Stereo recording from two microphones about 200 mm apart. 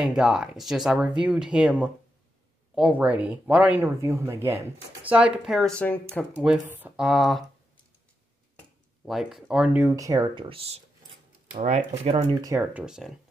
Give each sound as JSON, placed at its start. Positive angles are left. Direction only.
{"t": 0.0, "sound": "speech", "side_deg": -5}
{"t": 6.4, "sound": "speech", "side_deg": -5}
{"t": 9.0, "sound": "speech", "side_deg": 0}
{"t": 12.4, "sound": "speech", "side_deg": -15}